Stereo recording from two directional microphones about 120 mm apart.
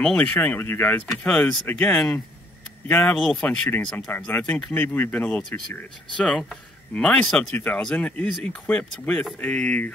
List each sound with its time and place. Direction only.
0.0 s speech: 10° left (ahead or behind)
3.2 s speech: centre (ahead or behind)
4.3 s speech: 15° left (ahead or behind)